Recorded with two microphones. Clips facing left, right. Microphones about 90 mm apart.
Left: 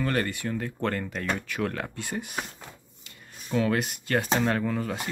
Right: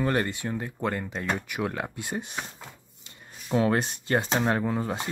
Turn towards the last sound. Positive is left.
turn(degrees=-25)  # may be behind; listen again after turning